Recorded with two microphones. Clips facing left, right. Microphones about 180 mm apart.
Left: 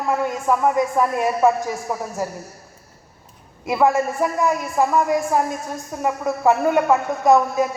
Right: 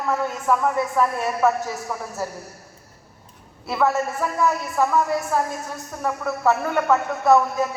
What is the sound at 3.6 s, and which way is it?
A woman's voice, 15° left (ahead or behind).